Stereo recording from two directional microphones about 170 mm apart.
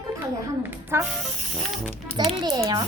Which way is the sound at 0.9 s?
15° right (ahead or behind).